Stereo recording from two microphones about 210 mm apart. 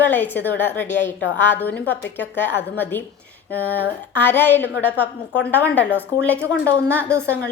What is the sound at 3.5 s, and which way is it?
A woman's voice, 10° left (ahead or behind).